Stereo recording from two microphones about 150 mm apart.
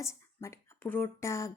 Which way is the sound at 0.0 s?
15° left (ahead or behind).